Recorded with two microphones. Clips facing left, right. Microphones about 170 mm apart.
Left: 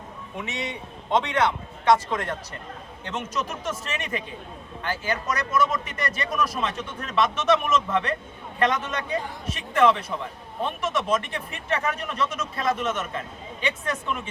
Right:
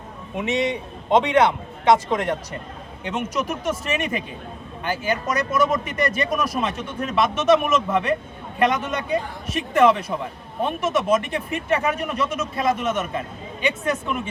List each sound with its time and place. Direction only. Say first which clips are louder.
0.5 s speech: right 10 dB; 15° right (ahead or behind)